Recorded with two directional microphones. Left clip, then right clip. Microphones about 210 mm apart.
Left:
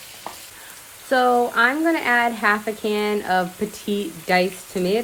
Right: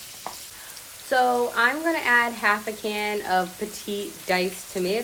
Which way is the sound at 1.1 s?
50° left (ahead or behind).